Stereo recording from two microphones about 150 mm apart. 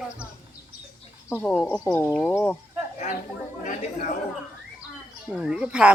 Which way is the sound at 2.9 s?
55° left (ahead or behind).